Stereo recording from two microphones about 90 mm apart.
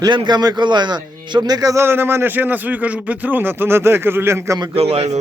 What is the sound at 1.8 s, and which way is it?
A man's voice, 25° right (ahead or behind).